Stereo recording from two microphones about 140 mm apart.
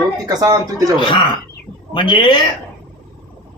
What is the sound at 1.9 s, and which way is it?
Speech, 35° left (ahead or behind).